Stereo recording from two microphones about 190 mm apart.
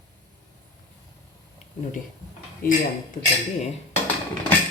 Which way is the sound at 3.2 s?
25° left (ahead or behind).